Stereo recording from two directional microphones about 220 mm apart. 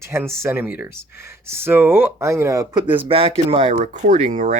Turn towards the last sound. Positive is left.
turn(degrees=-35)  # may be behind; listen again after turning